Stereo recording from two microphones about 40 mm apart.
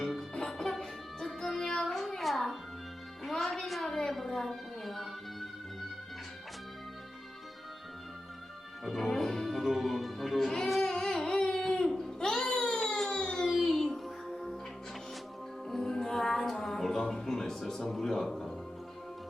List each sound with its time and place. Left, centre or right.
0.0 s music: centre
0.3 s music: centre
8.8 s music: centre
11.9 s a sound: centre
12.3 s baby cry: centre
13.1 s a sound: centre
13.5 s music: centre
14.3 s music: centre
15.7 s music: centre
17.8 s a sound: centre